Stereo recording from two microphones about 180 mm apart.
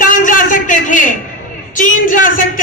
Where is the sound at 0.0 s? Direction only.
45° left (ahead or behind).